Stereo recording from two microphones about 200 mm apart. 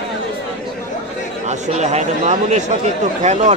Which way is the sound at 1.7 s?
35° right (ahead or behind).